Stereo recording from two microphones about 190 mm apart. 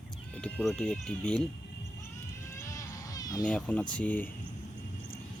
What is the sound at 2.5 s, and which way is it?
Cat, 15° left (ahead or behind).